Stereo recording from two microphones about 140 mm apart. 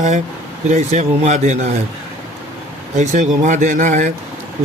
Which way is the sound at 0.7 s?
60° right (ahead or behind).